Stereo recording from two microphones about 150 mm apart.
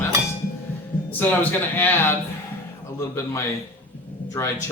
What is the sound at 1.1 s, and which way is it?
Speech, 10° left (ahead or behind).